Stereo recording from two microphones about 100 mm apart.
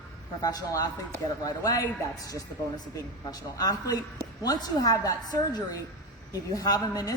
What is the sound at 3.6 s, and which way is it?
A woman's voice, 40° left (ahead or behind).